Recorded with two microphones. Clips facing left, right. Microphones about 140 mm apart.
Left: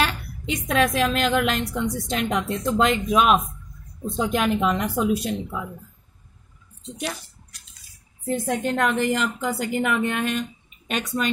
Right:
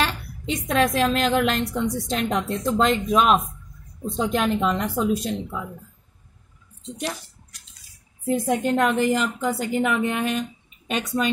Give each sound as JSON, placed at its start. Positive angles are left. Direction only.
{"t": 0.0, "sound": "a woman's voice", "side_deg": 0}
{"t": 6.9, "sound": "a woman's voice", "side_deg": 0}
{"t": 8.3, "sound": "a woman's voice", "side_deg": -5}